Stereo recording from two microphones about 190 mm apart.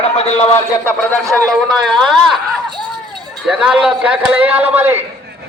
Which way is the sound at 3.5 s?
5° right (ahead or behind).